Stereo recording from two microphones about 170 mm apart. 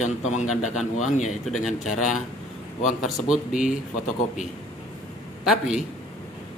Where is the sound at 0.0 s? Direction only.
45° left (ahead or behind).